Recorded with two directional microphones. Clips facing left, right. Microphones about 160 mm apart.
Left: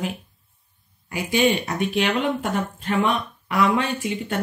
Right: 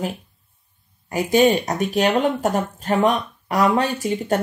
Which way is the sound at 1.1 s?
40° right (ahead or behind).